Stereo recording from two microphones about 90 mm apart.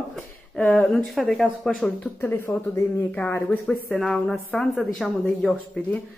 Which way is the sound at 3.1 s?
20° left (ahead or behind).